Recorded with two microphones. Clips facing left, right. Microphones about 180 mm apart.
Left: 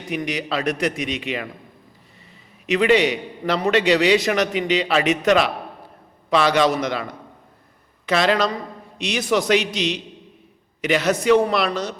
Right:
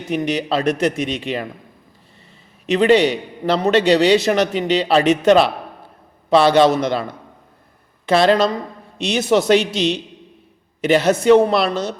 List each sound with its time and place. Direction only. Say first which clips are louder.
0.1 s speech: right 5 dB; 30° right (ahead or behind)
2.6 s a man's voice: right 3 dB; 30° right (ahead or behind)